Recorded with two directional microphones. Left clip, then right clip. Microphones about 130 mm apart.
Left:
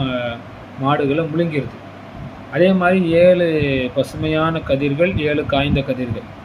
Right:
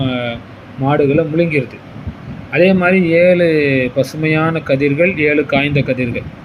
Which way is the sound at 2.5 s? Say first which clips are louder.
Right 3 dB; 25° right (ahead or behind).